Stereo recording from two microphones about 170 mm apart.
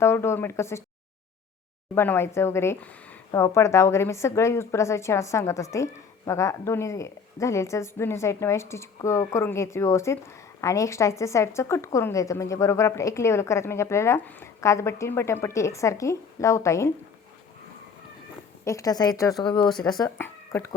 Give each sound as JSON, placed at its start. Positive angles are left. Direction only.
{"t": 0.0, "sound": "a woman's voice", "side_deg": 15}
{"t": 2.0, "sound": "a woman's voice", "side_deg": 15}
{"t": 18.6, "sound": "a woman's voice", "side_deg": 20}
{"t": 20.0, "sound": "speech", "side_deg": 15}